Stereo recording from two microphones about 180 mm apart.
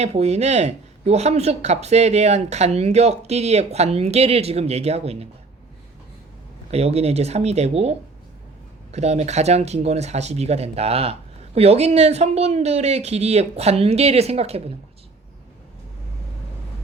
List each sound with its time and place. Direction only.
0.0 s speech: 35° right (ahead or behind)
6.7 s speech: 35° right (ahead or behind)